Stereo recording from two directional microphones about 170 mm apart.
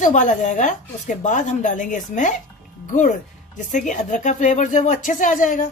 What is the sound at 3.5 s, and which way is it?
Speech, 45° left (ahead or behind).